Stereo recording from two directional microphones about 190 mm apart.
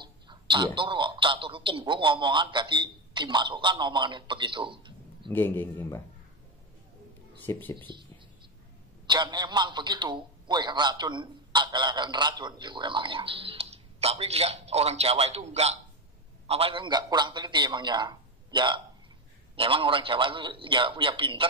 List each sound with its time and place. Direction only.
0.0 s speech: 25° right (ahead or behind)
5.3 s a man's voice: 10° left (ahead or behind)
7.4 s a man's voice: 10° left (ahead or behind)
9.0 s a man's voice: 25° right (ahead or behind)